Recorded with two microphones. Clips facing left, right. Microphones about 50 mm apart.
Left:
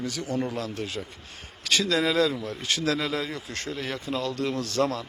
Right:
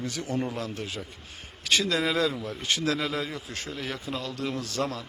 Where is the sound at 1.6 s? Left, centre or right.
Centre.